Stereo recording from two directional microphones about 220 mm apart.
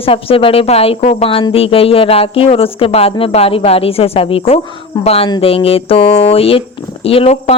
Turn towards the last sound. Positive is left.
turn(degrees=25)  # may be behind; listen again after turning